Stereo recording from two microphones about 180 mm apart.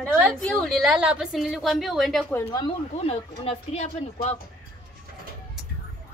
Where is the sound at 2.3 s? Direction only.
10° left (ahead or behind).